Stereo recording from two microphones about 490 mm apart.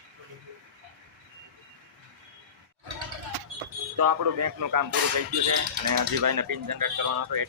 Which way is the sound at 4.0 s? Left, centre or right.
Right.